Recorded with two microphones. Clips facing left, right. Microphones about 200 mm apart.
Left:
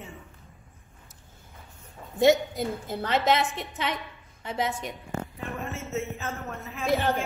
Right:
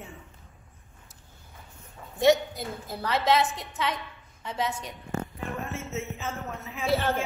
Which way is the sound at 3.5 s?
25° left (ahead or behind).